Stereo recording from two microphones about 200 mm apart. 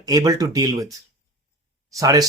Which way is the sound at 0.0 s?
15° right (ahead or behind).